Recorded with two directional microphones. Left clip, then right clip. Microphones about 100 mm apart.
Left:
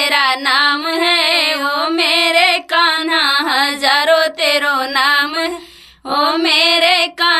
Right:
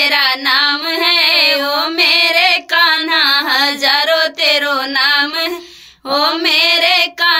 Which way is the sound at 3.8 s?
40° left (ahead or behind).